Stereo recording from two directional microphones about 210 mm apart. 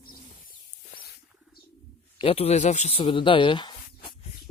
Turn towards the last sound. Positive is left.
turn(degrees=25)  # may be behind; listen again after turning